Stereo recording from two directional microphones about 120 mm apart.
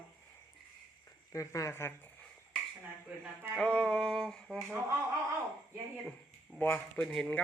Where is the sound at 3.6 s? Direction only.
10° left (ahead or behind).